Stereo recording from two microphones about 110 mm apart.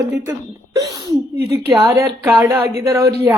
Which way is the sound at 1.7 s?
25° right (ahead or behind).